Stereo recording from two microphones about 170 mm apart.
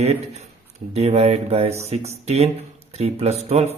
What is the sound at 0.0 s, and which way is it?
Speech, 40° right (ahead or behind).